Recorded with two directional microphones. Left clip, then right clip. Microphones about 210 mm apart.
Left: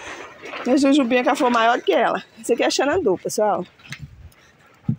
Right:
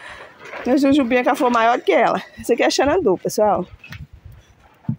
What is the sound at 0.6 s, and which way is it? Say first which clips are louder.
Speech: right 1 dB; 5° right (ahead or behind).